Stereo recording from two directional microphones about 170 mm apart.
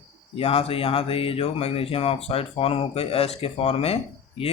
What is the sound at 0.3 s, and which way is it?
Speech, 35° left (ahead or behind).